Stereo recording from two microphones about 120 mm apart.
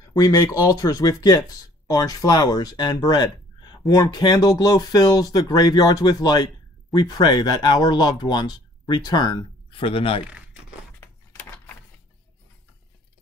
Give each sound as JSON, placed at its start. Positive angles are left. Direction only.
{"t": 0.1, "sound": "speech", "side_deg": 30}
{"t": 10.2, "sound": "crumpling", "side_deg": -10}